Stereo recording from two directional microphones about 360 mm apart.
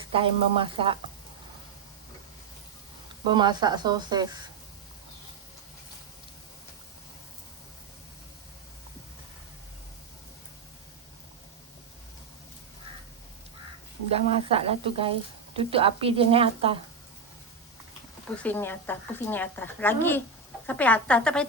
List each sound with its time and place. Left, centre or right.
0.1 s a woman's voice: centre
3.2 s a woman's voice: centre
14.1 s a woman's voice: centre
18.4 s a woman's voice: centre